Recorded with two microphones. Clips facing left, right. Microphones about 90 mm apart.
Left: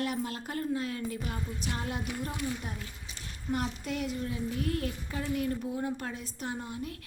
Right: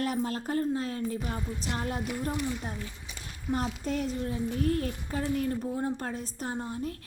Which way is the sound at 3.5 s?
35° right (ahead or behind).